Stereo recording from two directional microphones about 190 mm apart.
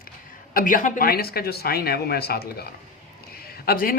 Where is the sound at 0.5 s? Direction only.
45° left (ahead or behind).